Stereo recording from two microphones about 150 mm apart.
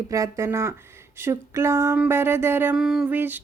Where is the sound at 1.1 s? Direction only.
15° right (ahead or behind).